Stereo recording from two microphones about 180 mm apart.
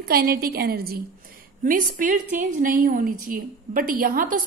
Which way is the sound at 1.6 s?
45° right (ahead or behind).